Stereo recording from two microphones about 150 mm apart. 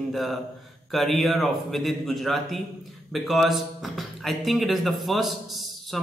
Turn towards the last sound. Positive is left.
turn(degrees=0)  # may be behind; listen again after turning